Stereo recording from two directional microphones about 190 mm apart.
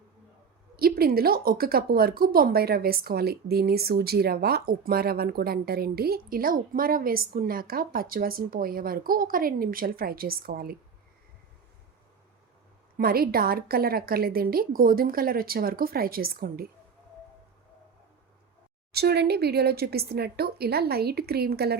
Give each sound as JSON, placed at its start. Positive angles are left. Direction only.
{"t": 0.8, "sound": "speech", "side_deg": -50}
{"t": 13.0, "sound": "speech", "side_deg": -50}
{"t": 18.9, "sound": "speech", "side_deg": -55}